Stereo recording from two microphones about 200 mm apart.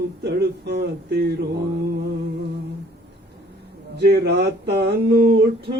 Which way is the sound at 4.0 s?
55° right (ahead or behind).